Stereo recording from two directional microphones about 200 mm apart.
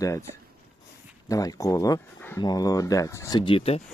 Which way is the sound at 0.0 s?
15° left (ahead or behind).